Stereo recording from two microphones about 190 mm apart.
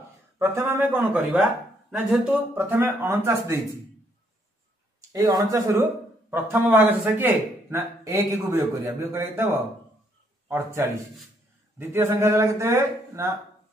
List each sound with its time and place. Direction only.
0.4 s speech: 15° right (ahead or behind)
5.1 s speech: 20° right (ahead or behind)
10.5 s speech: 15° right (ahead or behind)
11.9 s speech: 15° right (ahead or behind)